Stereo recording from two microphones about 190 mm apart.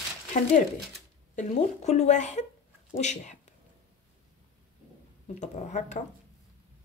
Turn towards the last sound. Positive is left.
turn(degrees=40)  # may be behind; listen again after turning